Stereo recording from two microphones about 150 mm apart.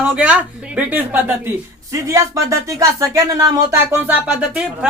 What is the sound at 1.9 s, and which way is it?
Speech, 20° right (ahead or behind).